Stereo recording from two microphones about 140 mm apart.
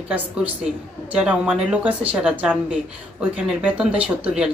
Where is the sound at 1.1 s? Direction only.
10° right (ahead or behind).